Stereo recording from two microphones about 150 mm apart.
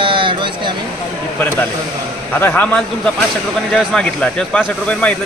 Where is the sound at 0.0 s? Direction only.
35° right (ahead or behind).